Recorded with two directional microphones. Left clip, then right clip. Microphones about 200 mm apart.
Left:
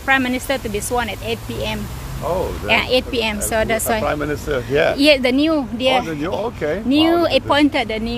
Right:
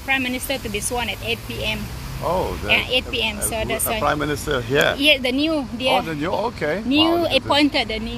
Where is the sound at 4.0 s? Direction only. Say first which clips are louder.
Even; 30° right (ahead or behind).